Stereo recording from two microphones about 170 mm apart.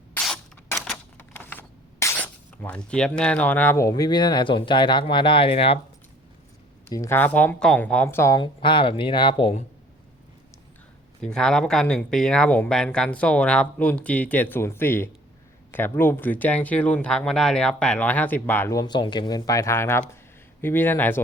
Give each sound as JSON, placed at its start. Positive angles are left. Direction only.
{"t": 0.2, "sound": "a sound", "side_deg": 5}
{"t": 6.8, "sound": "speech", "side_deg": 15}
{"t": 8.4, "sound": "speech", "side_deg": 30}
{"t": 11.2, "sound": "speech", "side_deg": 5}